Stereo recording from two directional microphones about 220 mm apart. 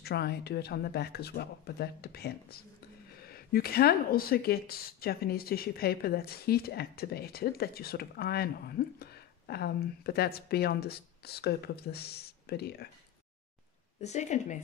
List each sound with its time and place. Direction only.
0.0 s speech: 50° left (ahead or behind)
14.0 s a woman's voice: 30° left (ahead or behind)